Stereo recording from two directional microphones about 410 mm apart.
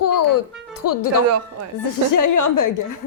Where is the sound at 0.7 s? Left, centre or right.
Left.